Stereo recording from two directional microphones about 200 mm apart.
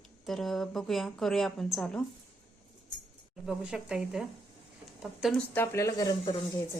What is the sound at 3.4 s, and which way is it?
Speech, 5° right (ahead or behind).